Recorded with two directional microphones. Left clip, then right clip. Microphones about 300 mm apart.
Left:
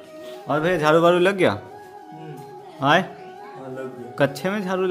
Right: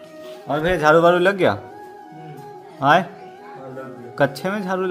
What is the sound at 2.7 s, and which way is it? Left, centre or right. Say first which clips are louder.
Speech: right 3 dB; centre.